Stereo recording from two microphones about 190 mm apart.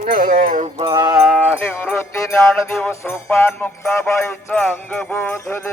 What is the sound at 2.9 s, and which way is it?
Music, 15° left (ahead or behind).